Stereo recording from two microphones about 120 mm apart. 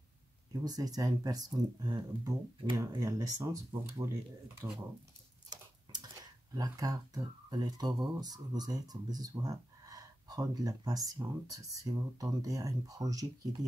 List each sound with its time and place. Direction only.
0.5 s speech: 35° right (ahead or behind)
5.5 s a sound: 35° right (ahead or behind)
8.2 s speech: 35° right (ahead or behind)